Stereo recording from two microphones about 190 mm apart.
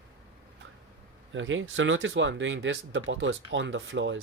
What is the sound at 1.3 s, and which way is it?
Speech, 90° right.